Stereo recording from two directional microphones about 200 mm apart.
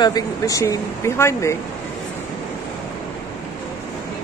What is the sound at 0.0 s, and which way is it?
Speech, 20° left (ahead or behind).